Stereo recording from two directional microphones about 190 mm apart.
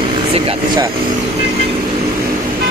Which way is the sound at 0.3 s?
30° right (ahead or behind).